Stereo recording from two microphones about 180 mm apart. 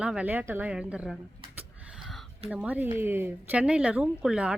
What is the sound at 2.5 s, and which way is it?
Speech, 5° right (ahead or behind).